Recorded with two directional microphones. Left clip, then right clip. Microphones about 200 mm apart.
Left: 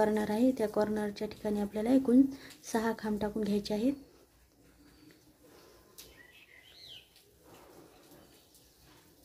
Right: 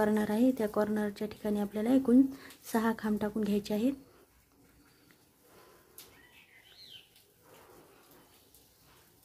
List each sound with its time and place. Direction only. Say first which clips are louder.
0.0 s a woman's voice: even; 20° right (ahead or behind)